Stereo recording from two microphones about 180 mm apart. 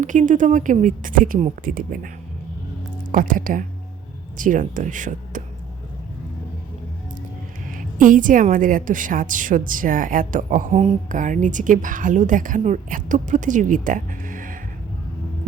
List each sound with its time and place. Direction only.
0.0 s a woman's voice: 45° right (ahead or behind)
3.1 s a woman's voice: 50° right (ahead or behind)
7.7 s a woman's voice: 50° right (ahead or behind)